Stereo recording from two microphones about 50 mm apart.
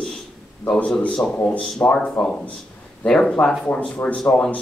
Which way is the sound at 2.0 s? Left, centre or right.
Left.